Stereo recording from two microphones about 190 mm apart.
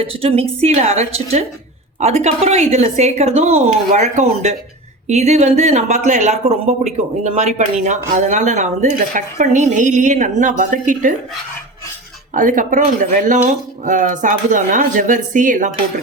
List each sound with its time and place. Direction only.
0.0 s speech: 30° right (ahead or behind)
12.3 s speech: 45° right (ahead or behind)